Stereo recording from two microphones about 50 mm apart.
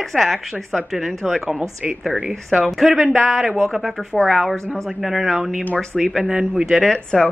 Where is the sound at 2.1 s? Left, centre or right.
Centre.